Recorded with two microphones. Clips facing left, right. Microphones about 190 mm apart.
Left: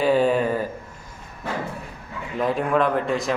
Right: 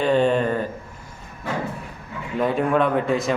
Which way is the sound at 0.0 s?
5° left (ahead or behind).